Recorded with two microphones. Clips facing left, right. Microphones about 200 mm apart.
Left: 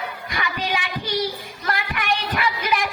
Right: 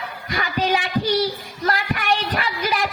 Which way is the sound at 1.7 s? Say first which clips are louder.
Right 3 dB; 35° right (ahead or behind).